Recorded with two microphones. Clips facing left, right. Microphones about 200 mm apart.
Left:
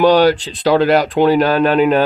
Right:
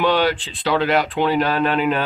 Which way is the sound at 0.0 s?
40° left (ahead or behind).